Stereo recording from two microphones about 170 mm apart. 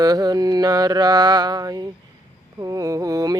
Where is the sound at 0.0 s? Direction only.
20° right (ahead or behind).